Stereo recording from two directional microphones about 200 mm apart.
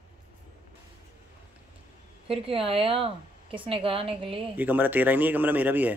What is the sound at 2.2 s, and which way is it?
A man's voice, 30° right (ahead or behind).